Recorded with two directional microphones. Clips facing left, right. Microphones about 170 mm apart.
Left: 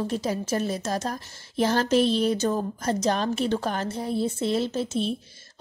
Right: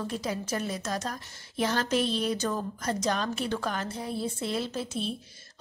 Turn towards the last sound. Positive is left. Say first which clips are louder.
# left 6 dB
turn(degrees=25)  # may be behind; listen again after turning